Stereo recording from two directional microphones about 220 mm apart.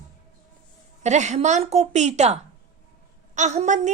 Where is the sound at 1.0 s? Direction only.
30° right (ahead or behind).